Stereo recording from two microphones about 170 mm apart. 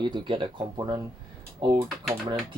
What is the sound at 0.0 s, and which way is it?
Speech, 30° right (ahead or behind).